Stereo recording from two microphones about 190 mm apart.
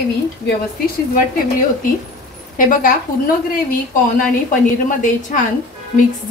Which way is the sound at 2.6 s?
45° left (ahead or behind).